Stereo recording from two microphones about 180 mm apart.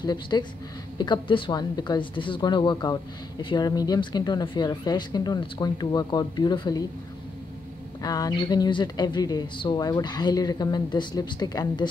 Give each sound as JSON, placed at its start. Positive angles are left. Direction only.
{"t": 0.0, "sound": "a woman's voice", "side_deg": 25}
{"t": 8.0, "sound": "a woman's voice", "side_deg": 20}